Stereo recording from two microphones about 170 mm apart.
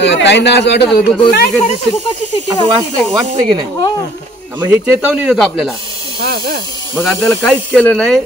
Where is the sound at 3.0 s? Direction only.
40° right (ahead or behind).